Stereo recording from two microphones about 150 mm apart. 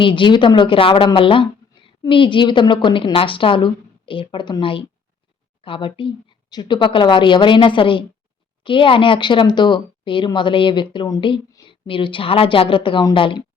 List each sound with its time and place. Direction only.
0.0 s a woman's voice: 35° left (ahead or behind)